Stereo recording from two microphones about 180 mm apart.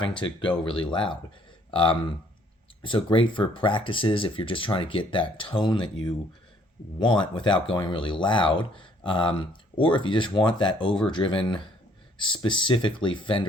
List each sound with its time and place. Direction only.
0.2 s speech: 25° left (ahead or behind)
7.0 s speech: 25° left (ahead or behind)